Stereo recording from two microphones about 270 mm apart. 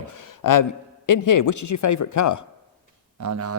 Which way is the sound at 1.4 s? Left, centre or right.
Left.